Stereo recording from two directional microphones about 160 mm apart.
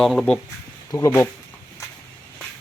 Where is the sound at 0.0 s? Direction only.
Centre (ahead or behind).